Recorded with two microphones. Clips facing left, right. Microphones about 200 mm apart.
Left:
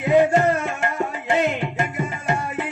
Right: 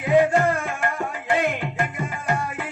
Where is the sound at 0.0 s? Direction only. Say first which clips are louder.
Left 2 dB; 25° left (ahead or behind).